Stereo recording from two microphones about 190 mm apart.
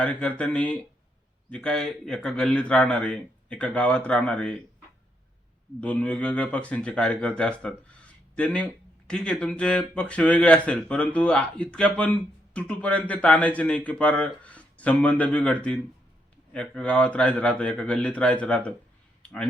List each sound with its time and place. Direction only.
0.0 s a man's voice: 5° left (ahead or behind)
5.8 s speech: 5° left (ahead or behind)
19.2 s a sound: 5° left (ahead or behind)